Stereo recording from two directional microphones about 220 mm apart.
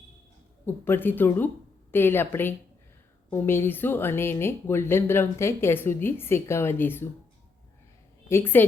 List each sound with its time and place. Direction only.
0.6 s speech: 10° left (ahead or behind)
8.3 s speech: 10° left (ahead or behind)